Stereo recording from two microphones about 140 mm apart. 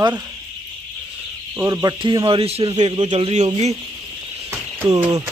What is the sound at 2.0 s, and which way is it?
A man's voice, 35° right (ahead or behind).